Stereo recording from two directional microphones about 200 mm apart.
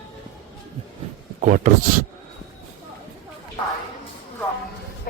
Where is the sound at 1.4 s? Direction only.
40° right (ahead or behind).